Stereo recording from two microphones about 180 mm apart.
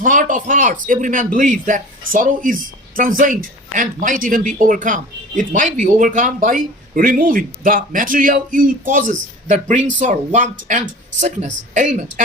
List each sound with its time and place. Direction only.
0.0 s speech: 45° right (ahead or behind)